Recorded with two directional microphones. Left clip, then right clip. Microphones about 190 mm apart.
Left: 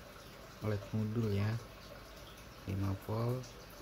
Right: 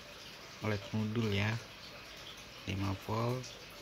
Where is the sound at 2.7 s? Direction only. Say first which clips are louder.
Right 3 dB; 15° right (ahead or behind).